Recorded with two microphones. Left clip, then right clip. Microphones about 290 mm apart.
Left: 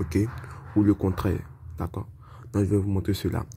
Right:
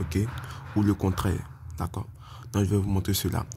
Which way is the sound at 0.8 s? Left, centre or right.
Centre.